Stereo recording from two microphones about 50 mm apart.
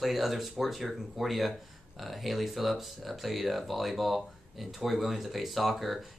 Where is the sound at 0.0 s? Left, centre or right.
Centre.